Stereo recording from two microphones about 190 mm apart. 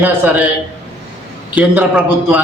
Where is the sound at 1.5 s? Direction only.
10° right (ahead or behind).